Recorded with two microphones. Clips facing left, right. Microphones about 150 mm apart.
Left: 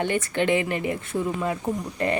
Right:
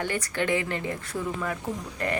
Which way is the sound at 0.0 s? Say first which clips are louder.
Left 5 dB; 20° left (ahead or behind).